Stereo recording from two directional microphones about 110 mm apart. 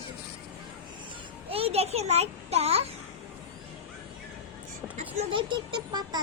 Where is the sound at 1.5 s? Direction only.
65° right (ahead or behind).